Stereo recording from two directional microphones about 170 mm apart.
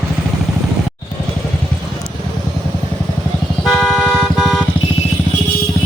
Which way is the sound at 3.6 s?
Centre (ahead or behind).